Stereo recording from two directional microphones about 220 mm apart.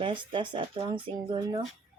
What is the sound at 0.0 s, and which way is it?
Speech, 20° right (ahead or behind).